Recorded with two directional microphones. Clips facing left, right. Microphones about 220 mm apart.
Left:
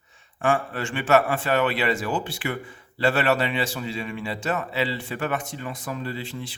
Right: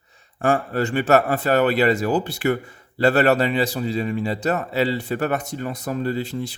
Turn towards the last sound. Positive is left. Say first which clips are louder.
# right 7 dB
turn(degrees=-40)  # may be behind; listen again after turning